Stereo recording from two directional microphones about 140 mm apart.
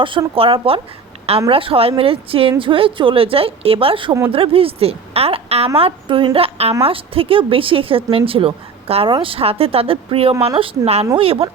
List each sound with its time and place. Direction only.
0.0 s a woman's voice: 35° right (ahead or behind)